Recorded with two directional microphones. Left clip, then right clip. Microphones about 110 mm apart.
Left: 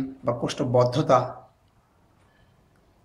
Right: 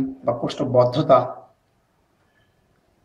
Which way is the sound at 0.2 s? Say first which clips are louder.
Right 2 dB; 20° left (ahead or behind).